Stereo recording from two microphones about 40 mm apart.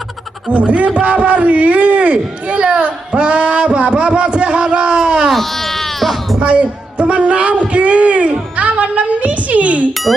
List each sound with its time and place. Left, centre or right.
0.5 s a man's voice: right
6.4 s a man's voice: right